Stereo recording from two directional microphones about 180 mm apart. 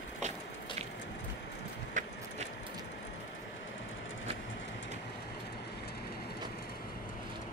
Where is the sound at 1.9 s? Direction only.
45° right (ahead or behind).